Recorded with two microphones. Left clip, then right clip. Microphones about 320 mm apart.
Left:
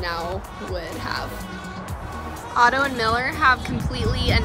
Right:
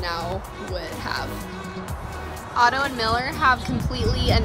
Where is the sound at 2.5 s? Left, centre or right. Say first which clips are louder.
Left 2 dB; centre.